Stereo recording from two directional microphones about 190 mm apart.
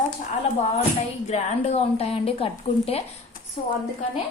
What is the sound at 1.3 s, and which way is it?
A woman's voice, 35° left (ahead or behind).